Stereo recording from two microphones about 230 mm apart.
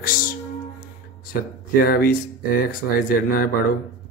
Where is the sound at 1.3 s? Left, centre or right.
Left.